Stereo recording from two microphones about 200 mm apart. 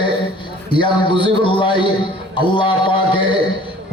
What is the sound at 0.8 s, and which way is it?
Music, 25° left (ahead or behind).